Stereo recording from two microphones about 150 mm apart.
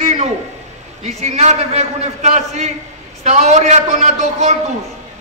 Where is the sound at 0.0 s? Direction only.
50° right (ahead or behind).